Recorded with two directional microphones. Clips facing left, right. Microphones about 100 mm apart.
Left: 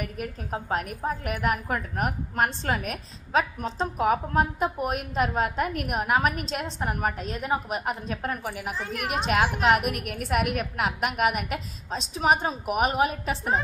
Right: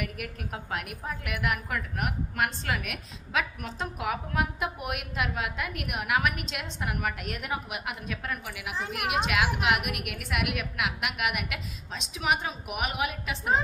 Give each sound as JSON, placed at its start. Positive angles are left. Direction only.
{"t": 0.0, "sound": "a woman's voice", "side_deg": 35}
{"t": 8.7, "sound": "a woman's voice", "side_deg": -15}
{"t": 9.1, "sound": "a woman's voice", "side_deg": 40}